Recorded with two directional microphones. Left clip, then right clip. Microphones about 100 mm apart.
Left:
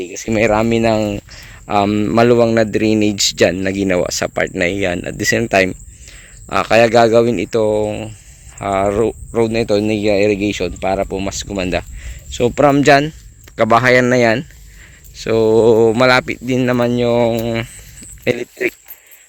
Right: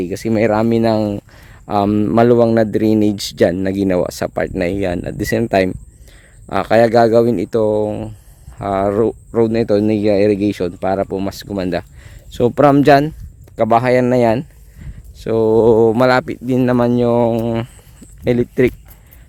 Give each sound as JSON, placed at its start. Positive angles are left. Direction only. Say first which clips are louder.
{"t": 0.0, "sound": "speech", "louder": "even", "side_deg": -55}
{"t": 12.3, "sound": "speech", "louder": "right 1 dB", "side_deg": -85}
{"t": 12.6, "sound": "speech", "louder": "even", "side_deg": -50}
{"t": 13.7, "sound": "speech", "louder": "left 2 dB", "side_deg": -25}
{"t": 18.3, "sound": "speech", "louder": "right 3 dB", "side_deg": -35}